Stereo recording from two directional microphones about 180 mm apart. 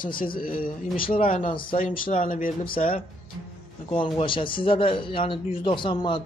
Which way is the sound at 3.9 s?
30° left (ahead or behind).